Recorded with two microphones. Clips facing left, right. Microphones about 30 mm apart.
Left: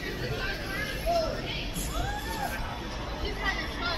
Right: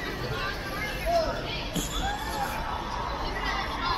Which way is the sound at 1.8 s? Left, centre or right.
Right.